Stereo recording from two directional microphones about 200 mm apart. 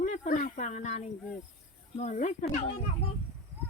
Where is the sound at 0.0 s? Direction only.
40° left (ahead or behind).